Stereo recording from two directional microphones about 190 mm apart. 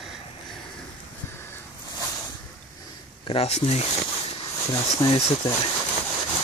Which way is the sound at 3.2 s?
30° left (ahead or behind).